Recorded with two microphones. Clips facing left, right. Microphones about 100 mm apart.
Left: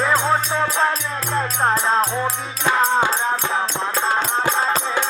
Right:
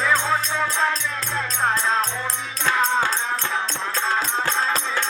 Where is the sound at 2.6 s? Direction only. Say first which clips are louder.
Left 3 dB; 15° left (ahead or behind).